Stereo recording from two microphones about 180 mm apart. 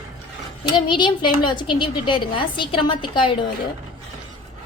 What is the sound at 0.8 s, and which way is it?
A woman's voice, 25° left (ahead or behind).